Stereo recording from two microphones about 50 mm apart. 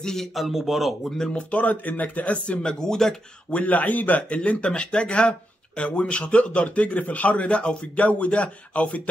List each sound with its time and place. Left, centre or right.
0.0 s a man's voice: centre
1.3 s a man's voice: left
2.6 s speech: centre
3.5 s a man's voice: left